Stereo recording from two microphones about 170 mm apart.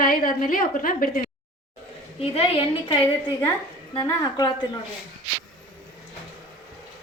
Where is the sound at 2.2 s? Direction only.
35° left (ahead or behind).